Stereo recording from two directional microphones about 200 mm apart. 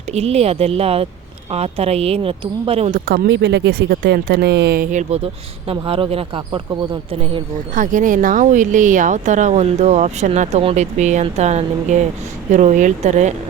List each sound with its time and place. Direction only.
0.1 s speech: 30° right (ahead or behind)
3.1 s speech: 55° right (ahead or behind); by 5.2 s 40° right (ahead or behind)
5.6 s speech: 25° right (ahead or behind)
7.7 s speech: 40° right (ahead or behind)